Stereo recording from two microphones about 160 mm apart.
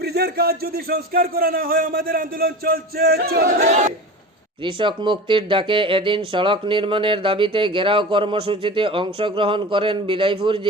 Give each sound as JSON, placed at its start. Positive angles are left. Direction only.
{"t": 0.0, "sound": "speech", "side_deg": -85}
{"t": 4.6, "sound": "speech", "side_deg": -30}